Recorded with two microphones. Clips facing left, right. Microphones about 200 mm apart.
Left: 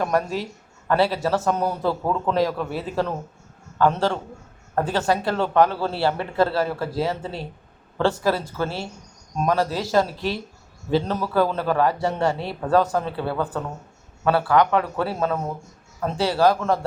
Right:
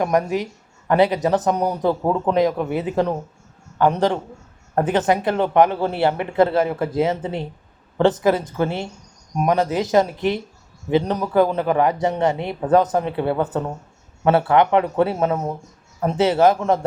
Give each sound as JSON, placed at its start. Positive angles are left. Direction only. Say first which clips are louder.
{"t": 0.0, "sound": "a man's voice", "louder": "right 3 dB", "side_deg": -15}